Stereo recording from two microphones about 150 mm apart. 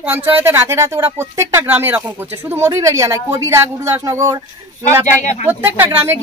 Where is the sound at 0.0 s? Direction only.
15° right (ahead or behind).